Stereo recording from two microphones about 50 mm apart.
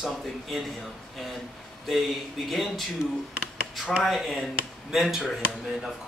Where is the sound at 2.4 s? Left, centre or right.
Centre.